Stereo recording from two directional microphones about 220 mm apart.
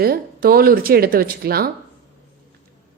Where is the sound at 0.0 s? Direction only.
40° right (ahead or behind).